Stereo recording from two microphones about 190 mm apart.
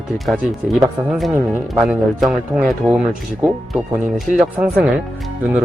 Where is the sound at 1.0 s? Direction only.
Centre (ahead or behind).